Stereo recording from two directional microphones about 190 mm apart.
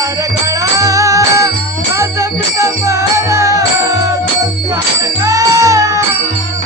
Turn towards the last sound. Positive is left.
turn(degrees=-15)  # may be behind; listen again after turning